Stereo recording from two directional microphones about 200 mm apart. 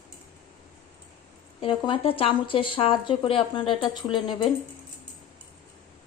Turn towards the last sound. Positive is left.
turn(degrees=25)  # may be behind; listen again after turning